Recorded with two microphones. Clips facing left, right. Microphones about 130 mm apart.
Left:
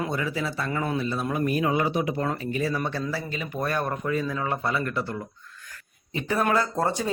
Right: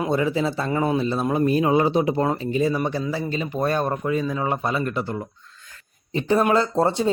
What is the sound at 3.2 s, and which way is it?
Speech, 30° right (ahead or behind).